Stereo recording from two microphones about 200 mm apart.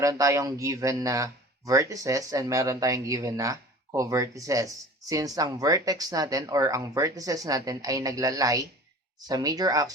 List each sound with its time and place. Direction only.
0.0 s speech: 15° right (ahead or behind)